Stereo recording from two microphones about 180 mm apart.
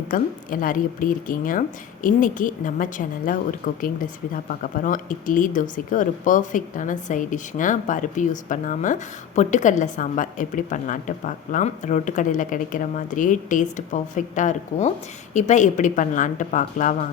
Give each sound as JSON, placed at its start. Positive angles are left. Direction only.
{"t": 0.1, "sound": "a woman's voice", "side_deg": 50}